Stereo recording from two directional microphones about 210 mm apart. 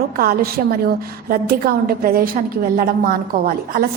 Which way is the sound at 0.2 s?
45° right (ahead or behind).